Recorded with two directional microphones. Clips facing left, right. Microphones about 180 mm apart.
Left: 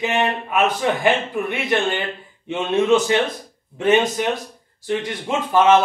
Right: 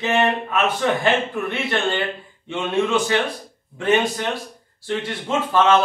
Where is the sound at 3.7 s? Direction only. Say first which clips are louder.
Left 2 dB; 20° left (ahead or behind).